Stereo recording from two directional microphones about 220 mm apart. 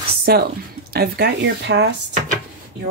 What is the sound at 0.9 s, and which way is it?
Speech, 45° right (ahead or behind).